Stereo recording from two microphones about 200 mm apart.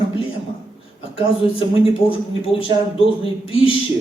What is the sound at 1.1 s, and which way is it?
Speech, 25° left (ahead or behind).